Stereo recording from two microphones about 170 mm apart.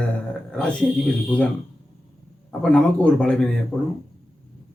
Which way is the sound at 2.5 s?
5° left (ahead or behind).